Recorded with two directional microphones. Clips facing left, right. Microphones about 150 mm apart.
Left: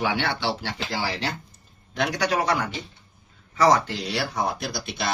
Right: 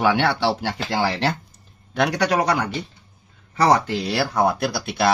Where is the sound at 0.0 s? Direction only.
70° right (ahead or behind).